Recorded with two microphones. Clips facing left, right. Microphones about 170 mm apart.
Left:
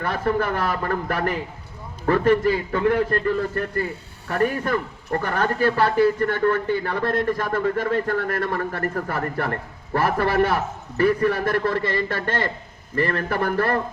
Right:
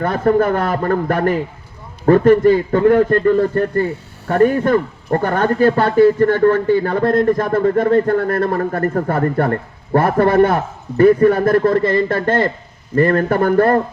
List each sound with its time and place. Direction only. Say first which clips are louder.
0.0 s a man's voice: right 8 dB; 45° right (ahead or behind)